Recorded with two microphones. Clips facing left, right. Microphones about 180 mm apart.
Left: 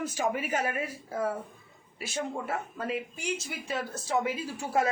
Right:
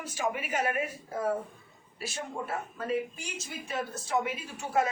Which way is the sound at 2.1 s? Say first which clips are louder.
Left 4 dB; 20° left (ahead or behind).